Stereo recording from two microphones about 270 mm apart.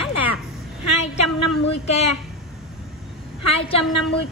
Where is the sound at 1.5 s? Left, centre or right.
Left.